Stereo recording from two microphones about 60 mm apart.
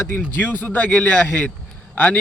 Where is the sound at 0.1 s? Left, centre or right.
Left.